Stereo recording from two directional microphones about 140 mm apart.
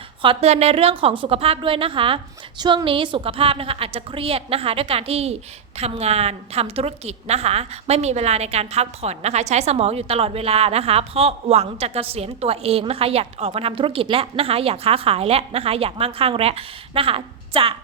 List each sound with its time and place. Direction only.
0.2 s a woman's voice: 40° right (ahead or behind)